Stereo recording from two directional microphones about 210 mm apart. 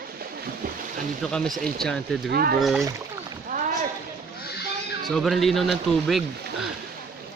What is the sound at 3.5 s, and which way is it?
Run, 40° right (ahead or behind).